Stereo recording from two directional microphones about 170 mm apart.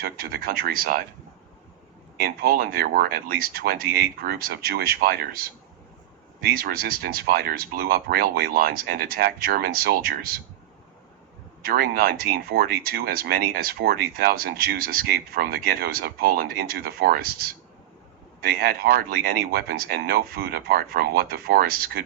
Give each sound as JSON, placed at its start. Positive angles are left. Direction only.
{"t": 0.0, "sound": "speech", "side_deg": -60}
{"t": 2.1, "sound": "speech", "side_deg": -65}
{"t": 6.6, "sound": "speech", "side_deg": -60}
{"t": 11.6, "sound": "speech", "side_deg": -60}
{"t": 18.5, "sound": "speech", "side_deg": -60}